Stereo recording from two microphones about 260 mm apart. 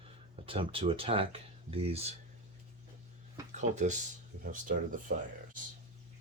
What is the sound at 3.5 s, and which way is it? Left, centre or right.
Speech, right.